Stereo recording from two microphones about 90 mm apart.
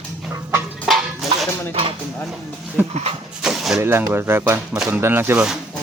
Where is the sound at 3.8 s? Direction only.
25° right (ahead or behind).